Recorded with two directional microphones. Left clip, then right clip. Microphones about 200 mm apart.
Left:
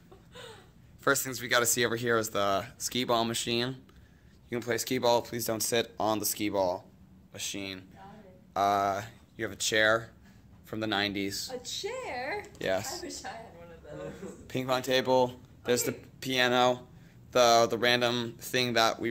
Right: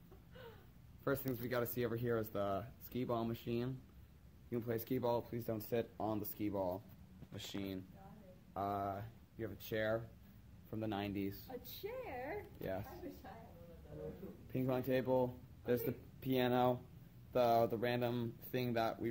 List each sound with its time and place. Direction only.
1.0 s speech: centre (ahead or behind)
11.8 s a sound: 40° right (ahead or behind)
14.5 s speech: centre (ahead or behind)